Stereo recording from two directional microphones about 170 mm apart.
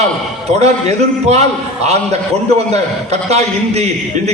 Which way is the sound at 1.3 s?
40° right (ahead or behind).